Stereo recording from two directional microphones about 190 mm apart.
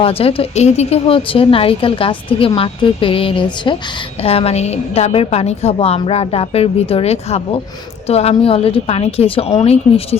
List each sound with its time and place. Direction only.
0.0 s a woman's voice: 30° left (ahead or behind)